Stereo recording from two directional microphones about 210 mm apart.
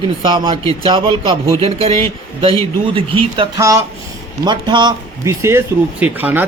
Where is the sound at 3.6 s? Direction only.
15° right (ahead or behind).